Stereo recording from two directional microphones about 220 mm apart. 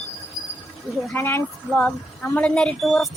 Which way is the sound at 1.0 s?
10° left (ahead or behind).